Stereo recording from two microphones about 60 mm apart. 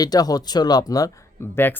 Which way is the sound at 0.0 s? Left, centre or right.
Left.